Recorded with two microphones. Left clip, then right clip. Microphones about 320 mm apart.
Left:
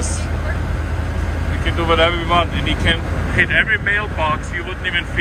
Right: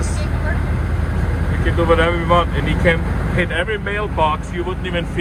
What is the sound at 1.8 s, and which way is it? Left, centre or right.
Speech, centre.